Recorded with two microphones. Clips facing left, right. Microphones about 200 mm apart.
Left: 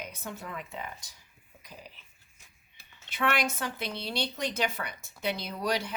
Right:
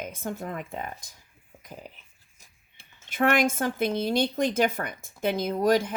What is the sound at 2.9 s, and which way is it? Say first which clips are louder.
Speech: right 6 dB; 50° right (ahead or behind).